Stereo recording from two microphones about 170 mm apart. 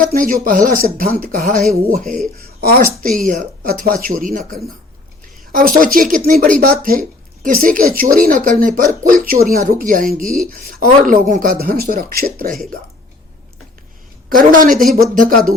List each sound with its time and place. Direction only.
0.0 s speech: 55° right (ahead or behind)
2.4 s a sound: 60° right (ahead or behind)
3.2 s speech: 50° right (ahead or behind)
5.5 s speech: 55° right (ahead or behind)
14.3 s speech: 55° right (ahead or behind)